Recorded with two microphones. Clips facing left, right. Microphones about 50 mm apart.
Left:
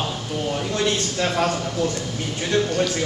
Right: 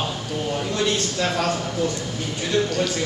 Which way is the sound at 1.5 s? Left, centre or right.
Centre.